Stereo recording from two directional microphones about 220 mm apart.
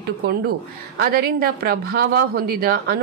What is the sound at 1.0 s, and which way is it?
Speech, 45° right (ahead or behind).